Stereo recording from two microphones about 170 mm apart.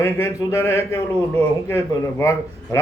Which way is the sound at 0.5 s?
15° left (ahead or behind).